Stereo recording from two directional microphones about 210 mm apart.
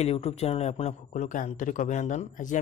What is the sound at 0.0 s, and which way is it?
A man's voice, 30° left (ahead or behind).